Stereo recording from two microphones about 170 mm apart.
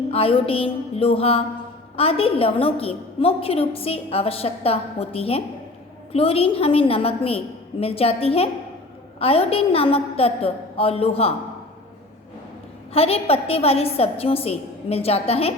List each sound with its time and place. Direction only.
0.1 s a woman's voice: 35° left (ahead or behind)
12.9 s a woman's voice: 35° left (ahead or behind)